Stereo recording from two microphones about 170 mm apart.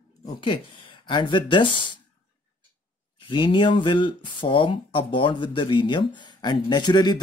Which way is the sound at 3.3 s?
30° left (ahead or behind).